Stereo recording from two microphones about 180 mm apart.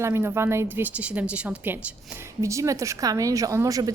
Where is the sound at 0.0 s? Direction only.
15° right (ahead or behind).